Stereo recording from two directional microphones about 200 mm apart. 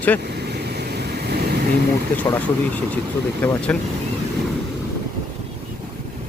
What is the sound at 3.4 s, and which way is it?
Speech, 5° left (ahead or behind).